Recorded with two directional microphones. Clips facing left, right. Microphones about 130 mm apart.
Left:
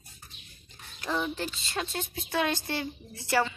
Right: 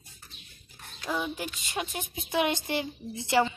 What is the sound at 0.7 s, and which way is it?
Speech, 5° right (ahead or behind).